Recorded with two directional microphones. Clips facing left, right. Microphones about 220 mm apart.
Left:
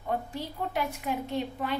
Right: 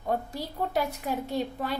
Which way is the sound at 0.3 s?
40° right (ahead or behind).